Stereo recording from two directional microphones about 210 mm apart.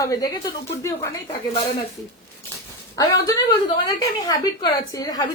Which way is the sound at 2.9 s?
15° left (ahead or behind).